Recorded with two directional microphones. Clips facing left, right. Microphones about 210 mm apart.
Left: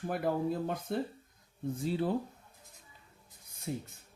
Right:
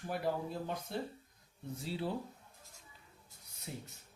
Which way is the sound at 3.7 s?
45° left (ahead or behind).